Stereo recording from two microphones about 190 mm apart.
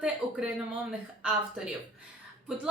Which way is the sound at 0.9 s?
5° right (ahead or behind).